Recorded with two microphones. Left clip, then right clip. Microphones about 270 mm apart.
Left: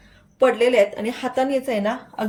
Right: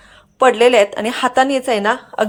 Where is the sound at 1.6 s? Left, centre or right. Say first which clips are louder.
Right 7 dB; right.